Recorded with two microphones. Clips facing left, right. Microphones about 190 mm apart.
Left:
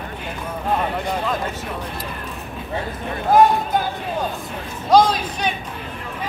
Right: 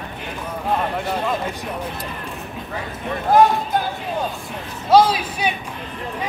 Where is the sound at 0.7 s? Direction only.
Centre (ahead or behind).